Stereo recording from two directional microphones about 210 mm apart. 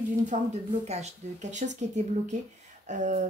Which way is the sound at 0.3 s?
30° right (ahead or behind).